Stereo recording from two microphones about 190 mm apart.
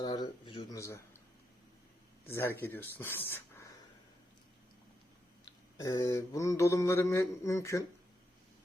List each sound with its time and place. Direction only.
0.0 s a sound: 20° left (ahead or behind)
0.8 s mantra: 15° left (ahead or behind)
2.2 s mantra: 15° left (ahead or behind)
5.8 s mantra: 15° left (ahead or behind)